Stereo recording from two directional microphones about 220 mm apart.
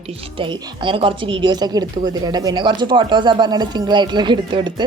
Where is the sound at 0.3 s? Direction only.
20° right (ahead or behind).